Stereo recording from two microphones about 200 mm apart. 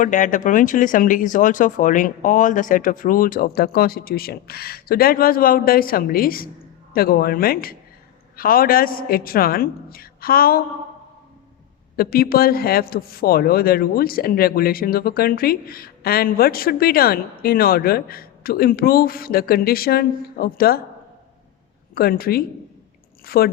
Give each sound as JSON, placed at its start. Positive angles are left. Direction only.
{"t": 0.0, "sound": "speech", "side_deg": 40}
{"t": 11.9, "sound": "speech", "side_deg": 50}
{"t": 21.9, "sound": "speech", "side_deg": 50}